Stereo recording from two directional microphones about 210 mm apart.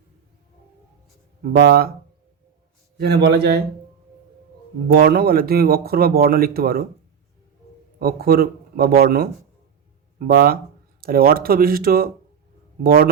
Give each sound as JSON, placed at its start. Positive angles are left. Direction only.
{"t": 1.4, "sound": "speech", "side_deg": -45}
{"t": 3.0, "sound": "speech", "side_deg": -50}
{"t": 5.0, "sound": "speech", "side_deg": -45}
{"t": 7.9, "sound": "speech", "side_deg": -45}